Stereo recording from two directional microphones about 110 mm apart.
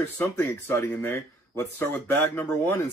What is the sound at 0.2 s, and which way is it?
Speech, 20° left (ahead or behind).